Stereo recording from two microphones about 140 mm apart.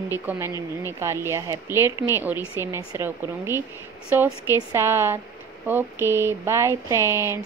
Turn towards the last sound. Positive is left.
turn(degrees=-20)  # may be behind; listen again after turning